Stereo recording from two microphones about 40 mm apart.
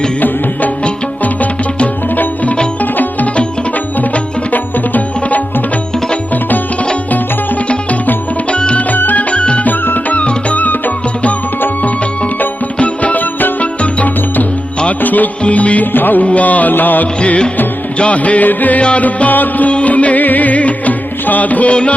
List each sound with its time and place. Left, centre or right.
1.2 s music: left
4.5 s music: left
8.4 s music: left
8.9 s music: left
9.3 s music: left
9.6 s music: left
10.2 s music: left
12.8 s music: left
15.4 s music: left
15.9 s music: left
16.2 s music: left
17.2 s music: left
18.8 s music: left
19.0 s music: left